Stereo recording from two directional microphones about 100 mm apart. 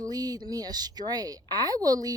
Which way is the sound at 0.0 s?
40° right (ahead or behind).